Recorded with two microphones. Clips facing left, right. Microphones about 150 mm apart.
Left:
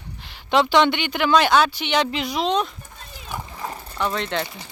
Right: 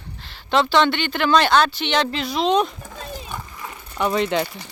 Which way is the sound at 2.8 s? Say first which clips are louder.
Right 9 dB; 90° right.